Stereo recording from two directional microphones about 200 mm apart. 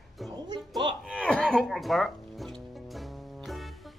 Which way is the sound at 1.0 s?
5° left (ahead or behind).